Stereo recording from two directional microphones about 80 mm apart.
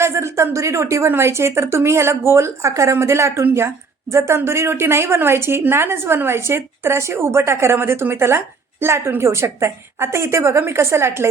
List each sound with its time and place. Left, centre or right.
0.0 s a woman's voice: right